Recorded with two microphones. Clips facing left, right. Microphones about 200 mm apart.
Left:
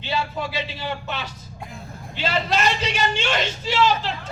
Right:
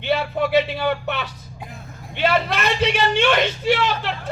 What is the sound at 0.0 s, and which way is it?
A man's voice, 60° right (ahead or behind).